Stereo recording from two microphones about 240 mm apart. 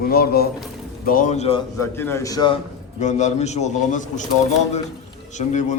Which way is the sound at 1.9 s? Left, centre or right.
Centre.